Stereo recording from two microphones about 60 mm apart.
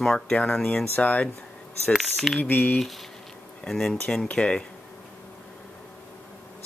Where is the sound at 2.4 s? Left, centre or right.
Left.